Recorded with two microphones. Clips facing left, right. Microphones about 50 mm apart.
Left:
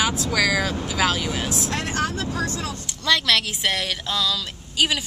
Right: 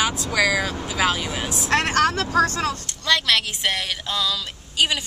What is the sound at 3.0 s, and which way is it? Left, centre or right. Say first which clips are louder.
Speech: even; centre.